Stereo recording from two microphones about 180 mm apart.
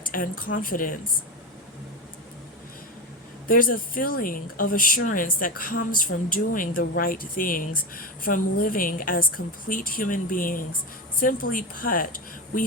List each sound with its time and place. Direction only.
0.0 s speech: 50° left (ahead or behind)
3.5 s speech: 50° left (ahead or behind)